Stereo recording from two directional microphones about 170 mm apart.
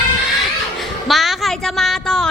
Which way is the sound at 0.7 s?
Centre (ahead or behind).